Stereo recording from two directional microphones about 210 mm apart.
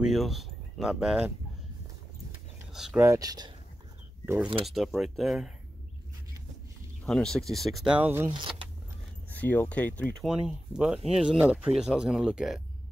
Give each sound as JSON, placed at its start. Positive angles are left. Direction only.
{"t": 0.0, "sound": "speech", "side_deg": 0}
{"t": 2.7, "sound": "speech", "side_deg": 0}
{"t": 3.1, "sound": "speech", "side_deg": -15}
{"t": 4.6, "sound": "speech", "side_deg": 0}
{"t": 7.1, "sound": "speech", "side_deg": 5}
{"t": 8.3, "sound": "speech", "side_deg": -25}
{"t": 9.3, "sound": "speech", "side_deg": 10}
{"t": 10.3, "sound": "speech", "side_deg": -5}